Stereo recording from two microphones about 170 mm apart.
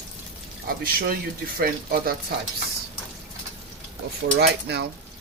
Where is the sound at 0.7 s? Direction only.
60° right (ahead or behind).